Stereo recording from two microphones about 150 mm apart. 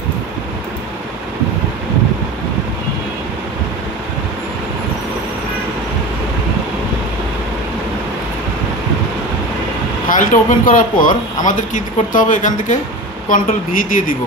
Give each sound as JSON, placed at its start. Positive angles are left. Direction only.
{"t": 10.0, "sound": "speech", "side_deg": 60}